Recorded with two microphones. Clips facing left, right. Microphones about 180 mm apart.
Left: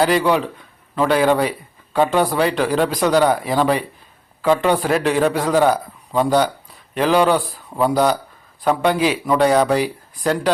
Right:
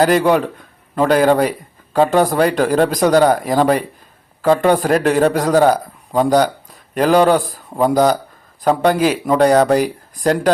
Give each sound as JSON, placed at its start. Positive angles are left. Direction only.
{"t": 0.0, "sound": "speech", "side_deg": -45}